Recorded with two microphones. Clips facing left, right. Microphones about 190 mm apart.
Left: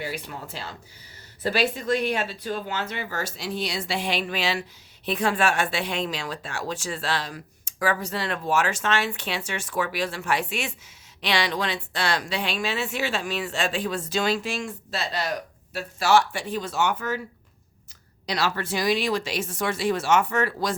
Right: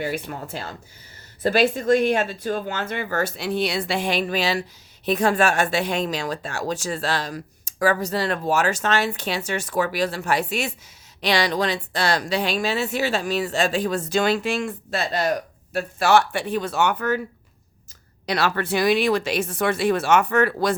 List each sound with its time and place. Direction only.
0.0 s a woman's voice: 50° right (ahead or behind)
18.3 s speech: 60° right (ahead or behind)